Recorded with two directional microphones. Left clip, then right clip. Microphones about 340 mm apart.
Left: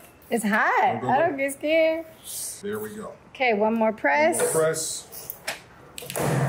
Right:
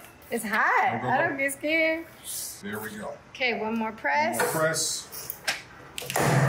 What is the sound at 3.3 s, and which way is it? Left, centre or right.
Speech, left.